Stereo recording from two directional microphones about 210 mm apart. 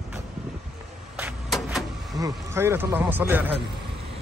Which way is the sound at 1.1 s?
5° right (ahead or behind).